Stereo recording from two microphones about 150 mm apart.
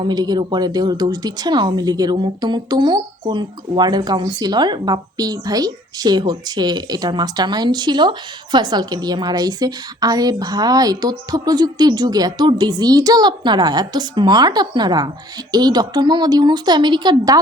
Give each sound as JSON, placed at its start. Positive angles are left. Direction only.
{"t": 0.0, "sound": "a woman's voice", "side_deg": -25}